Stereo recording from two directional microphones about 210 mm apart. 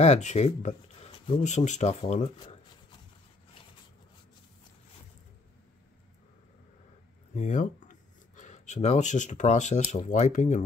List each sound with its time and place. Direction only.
0.0 s speech: 35° left (ahead or behind)
7.3 s speech: 35° left (ahead or behind)